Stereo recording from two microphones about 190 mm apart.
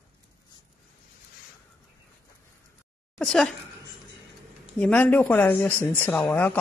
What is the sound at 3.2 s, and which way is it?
Speech, 5° left (ahead or behind).